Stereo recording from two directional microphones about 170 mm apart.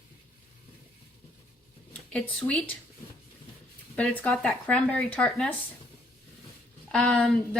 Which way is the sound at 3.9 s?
10° left (ahead or behind).